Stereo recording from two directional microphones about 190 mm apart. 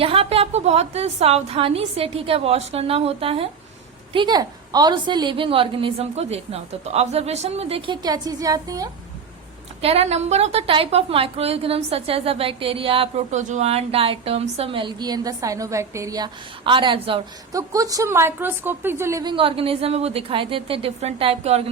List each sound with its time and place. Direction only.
0.0 s a woman's voice: 30° right (ahead or behind)
9.8 s a woman's voice: 35° right (ahead or behind)